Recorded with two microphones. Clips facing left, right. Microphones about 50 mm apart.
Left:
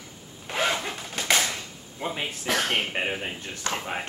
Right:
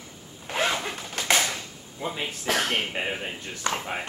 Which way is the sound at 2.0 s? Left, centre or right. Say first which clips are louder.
Left 1 dB; left.